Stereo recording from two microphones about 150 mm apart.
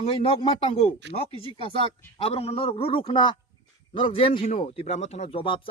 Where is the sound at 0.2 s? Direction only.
40° left (ahead or behind).